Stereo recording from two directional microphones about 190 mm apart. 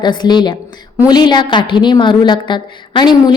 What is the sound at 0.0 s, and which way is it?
A woman's voice, 25° left (ahead or behind).